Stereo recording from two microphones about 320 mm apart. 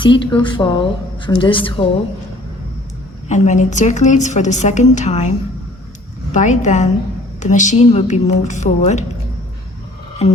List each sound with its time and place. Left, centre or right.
0.0 s speech: centre
3.2 s a woman's voice: left
6.3 s a woman's voice: left